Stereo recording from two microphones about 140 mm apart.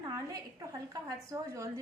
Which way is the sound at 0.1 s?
25° right (ahead or behind).